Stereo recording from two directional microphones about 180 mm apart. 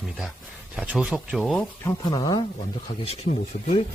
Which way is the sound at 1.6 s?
15° left (ahead or behind).